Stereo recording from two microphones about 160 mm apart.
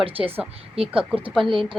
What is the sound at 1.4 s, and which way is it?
Speech, 35° right (ahead or behind).